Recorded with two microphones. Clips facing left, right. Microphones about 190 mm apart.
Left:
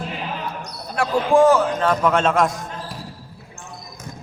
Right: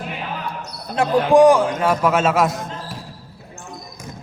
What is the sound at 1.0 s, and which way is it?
Speech, 20° right (ahead or behind).